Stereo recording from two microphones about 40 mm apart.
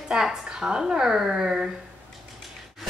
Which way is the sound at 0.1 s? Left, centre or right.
Centre.